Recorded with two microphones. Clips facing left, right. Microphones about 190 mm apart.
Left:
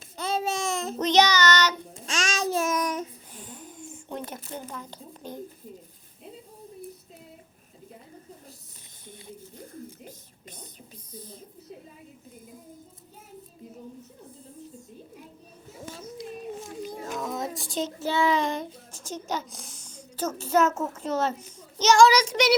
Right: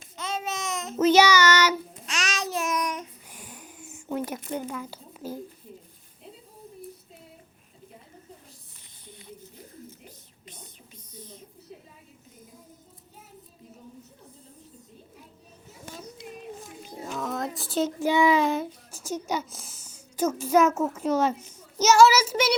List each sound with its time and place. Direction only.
0.2 s babbling: 35° left (ahead or behind)
0.9 s child singing: 5° right (ahead or behind)
2.0 s child singing: 30° left (ahead or behind)
3.3 s a sound: 10° right (ahead or behind)
17.1 s child singing: 5° left (ahead or behind)